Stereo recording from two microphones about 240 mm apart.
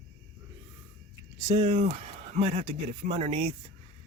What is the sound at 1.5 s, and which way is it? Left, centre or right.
Speech, right.